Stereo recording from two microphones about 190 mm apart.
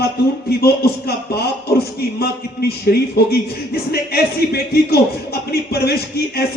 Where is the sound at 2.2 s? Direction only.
55° left (ahead or behind).